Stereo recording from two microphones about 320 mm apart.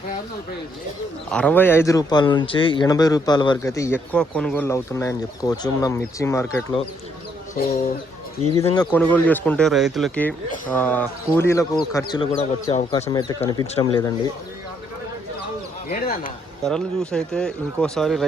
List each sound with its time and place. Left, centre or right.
1.3 s speech: centre
7.5 s speech: left
8.5 s speech: centre
15.9 s a sound: left
16.6 s speech: centre